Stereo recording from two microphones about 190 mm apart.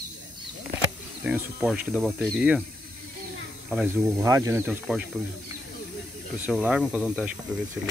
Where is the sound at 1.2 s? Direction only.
5° right (ahead or behind).